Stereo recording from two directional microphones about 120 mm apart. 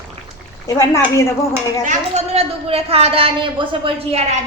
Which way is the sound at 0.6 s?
30° left (ahead or behind).